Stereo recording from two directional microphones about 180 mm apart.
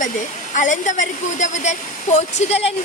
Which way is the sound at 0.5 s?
45° left (ahead or behind).